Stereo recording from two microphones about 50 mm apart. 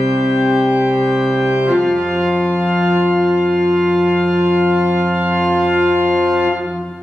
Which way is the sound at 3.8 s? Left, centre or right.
Centre.